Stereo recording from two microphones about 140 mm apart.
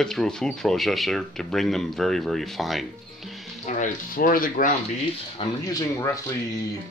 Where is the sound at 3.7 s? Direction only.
65° left (ahead or behind).